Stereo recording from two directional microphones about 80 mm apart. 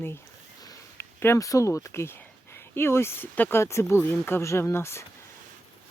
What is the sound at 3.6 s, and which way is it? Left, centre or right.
Speech, left.